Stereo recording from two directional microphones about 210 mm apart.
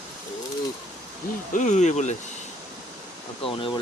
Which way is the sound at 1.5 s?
35° left (ahead or behind).